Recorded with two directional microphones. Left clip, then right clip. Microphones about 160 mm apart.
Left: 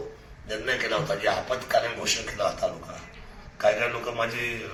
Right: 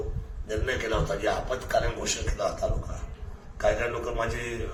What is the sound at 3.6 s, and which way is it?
Speech, 15° right (ahead or behind).